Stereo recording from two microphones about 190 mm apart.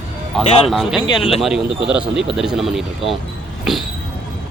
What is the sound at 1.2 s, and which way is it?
Speech, 30° left (ahead or behind).